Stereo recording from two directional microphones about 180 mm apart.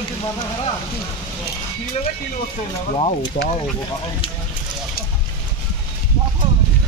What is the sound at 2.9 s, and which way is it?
Speech, 35° left (ahead or behind).